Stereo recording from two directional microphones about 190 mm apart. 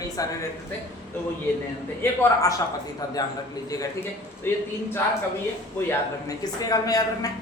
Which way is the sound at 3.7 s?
10° left (ahead or behind).